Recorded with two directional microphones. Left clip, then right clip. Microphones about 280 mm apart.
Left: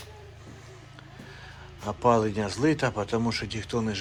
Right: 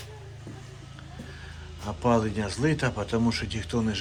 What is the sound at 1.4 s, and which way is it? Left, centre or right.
Speech, centre.